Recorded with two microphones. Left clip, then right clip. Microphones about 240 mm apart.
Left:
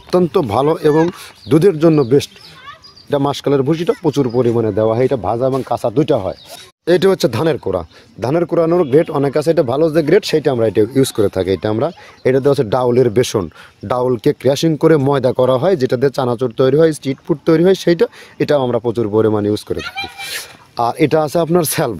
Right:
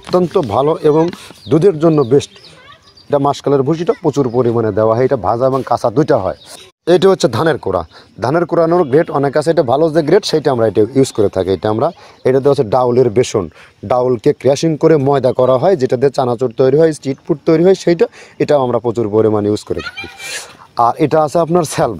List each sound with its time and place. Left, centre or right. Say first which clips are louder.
0.1 s speech: right 1 dB; centre
19.8 s speech: left 1 dB; left
20.2 s speech: even; centre